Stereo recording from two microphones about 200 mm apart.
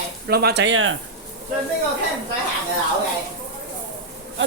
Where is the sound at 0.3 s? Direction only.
50° right (ahead or behind); by 0.9 s 75° right (ahead or behind).